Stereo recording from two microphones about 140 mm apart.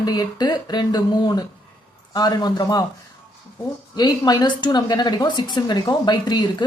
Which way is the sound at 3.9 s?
30° left (ahead or behind).